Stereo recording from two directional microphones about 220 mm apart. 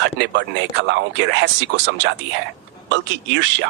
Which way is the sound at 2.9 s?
55° right (ahead or behind).